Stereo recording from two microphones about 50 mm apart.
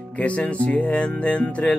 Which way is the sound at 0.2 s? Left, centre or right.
Left.